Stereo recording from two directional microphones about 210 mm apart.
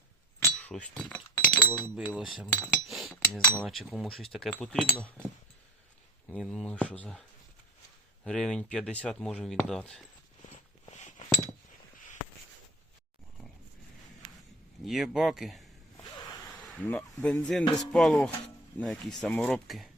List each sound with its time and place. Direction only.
0.3 s glass: 10° left (ahead or behind)
2.0 s speech: centre (ahead or behind)
3.2 s cutlery: 10° left (ahead or behind)
3.6 s speech: centre (ahead or behind)
6.3 s speech: 5° left (ahead or behind)
8.2 s speech: 5° left (ahead or behind)
10.8 s a sound: 35° left (ahead or behind)
14.8 s speech: centre (ahead or behind)
16.1 s zipper: 15° left (ahead or behind)
16.6 s speech: 5° left (ahead or behind)